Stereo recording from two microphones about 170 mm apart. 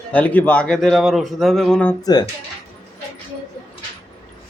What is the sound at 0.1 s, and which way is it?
A man's voice, 10° left (ahead or behind).